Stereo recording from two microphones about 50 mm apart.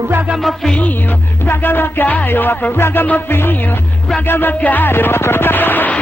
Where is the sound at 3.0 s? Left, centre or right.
Left.